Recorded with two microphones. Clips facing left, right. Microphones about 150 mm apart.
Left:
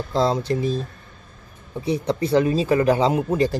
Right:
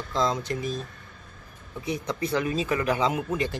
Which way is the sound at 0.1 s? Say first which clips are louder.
Left 6 dB; 30° left (ahead or behind).